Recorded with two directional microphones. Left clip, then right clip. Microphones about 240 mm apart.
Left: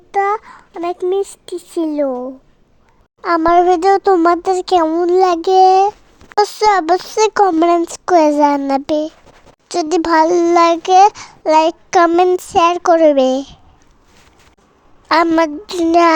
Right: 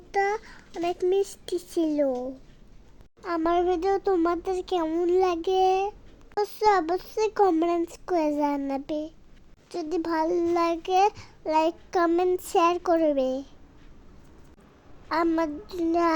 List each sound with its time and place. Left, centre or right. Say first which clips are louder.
0.1 s a sound: left 10 dB; centre
1.5 s a child's voice: left 7 dB; left
3.2 s a child's voice: left 14 dB; left
15.1 s a child's voice: left 13 dB; left